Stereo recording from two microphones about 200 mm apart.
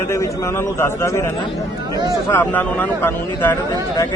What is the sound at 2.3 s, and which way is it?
A man's voice, 10° left (ahead or behind).